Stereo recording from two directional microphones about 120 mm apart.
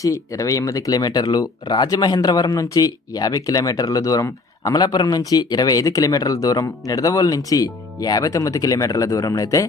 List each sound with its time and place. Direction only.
0.0 s speech: 30° left (ahead or behind)